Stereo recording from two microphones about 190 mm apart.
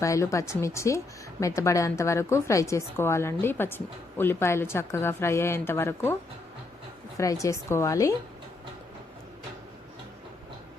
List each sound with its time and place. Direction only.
0.0 s speech: 15° left (ahead or behind)
7.2 s speech: 15° left (ahead or behind)